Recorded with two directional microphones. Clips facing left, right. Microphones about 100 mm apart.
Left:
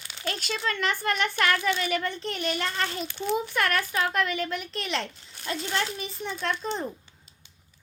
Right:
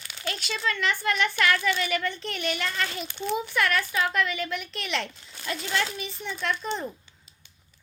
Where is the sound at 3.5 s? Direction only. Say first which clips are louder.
Right 1 dB; 45° left (ahead or behind).